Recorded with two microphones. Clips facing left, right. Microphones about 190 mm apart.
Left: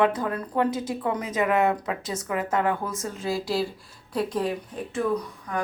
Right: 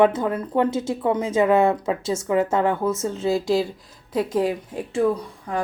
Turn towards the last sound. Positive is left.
turn(degrees=-30)  # may be behind; listen again after turning